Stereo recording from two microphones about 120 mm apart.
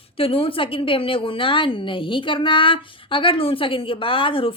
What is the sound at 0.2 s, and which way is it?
A woman's voice, 50° left (ahead or behind).